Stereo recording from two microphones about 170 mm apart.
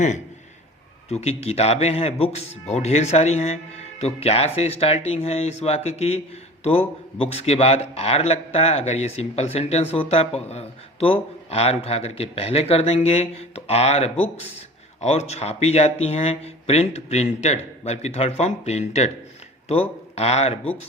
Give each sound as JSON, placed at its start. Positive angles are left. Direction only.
{"t": 1.1, "sound": "speech", "side_deg": 40}